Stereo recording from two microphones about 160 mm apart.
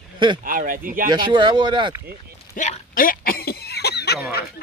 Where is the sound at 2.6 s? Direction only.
55° left (ahead or behind); by 4.1 s 90° left.